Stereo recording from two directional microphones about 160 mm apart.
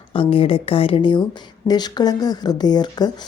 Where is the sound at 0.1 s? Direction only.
35° left (ahead or behind).